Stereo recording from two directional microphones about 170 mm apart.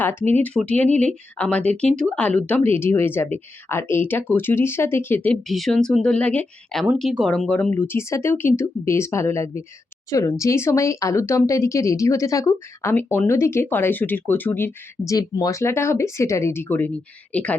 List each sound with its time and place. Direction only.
0.0 s speech: 10° left (ahead or behind)